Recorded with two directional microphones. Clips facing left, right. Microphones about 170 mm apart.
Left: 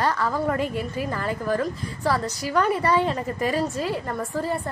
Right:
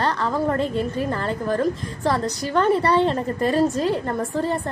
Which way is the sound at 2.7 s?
10° left (ahead or behind).